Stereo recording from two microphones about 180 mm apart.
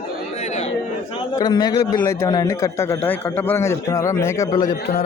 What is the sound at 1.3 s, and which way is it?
A man's voice, 20° left (ahead or behind).